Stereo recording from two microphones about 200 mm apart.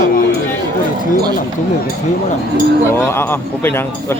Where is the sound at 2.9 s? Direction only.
10° left (ahead or behind).